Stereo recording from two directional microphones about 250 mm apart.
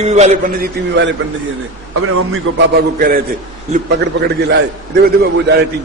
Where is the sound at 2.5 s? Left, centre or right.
Right.